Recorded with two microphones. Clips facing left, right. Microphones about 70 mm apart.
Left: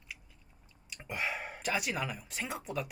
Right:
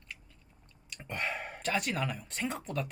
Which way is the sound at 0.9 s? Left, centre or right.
Centre.